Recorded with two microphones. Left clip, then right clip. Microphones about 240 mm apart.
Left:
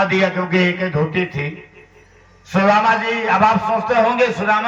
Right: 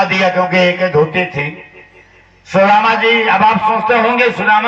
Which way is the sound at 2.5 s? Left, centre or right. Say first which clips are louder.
Right 4 dB; right.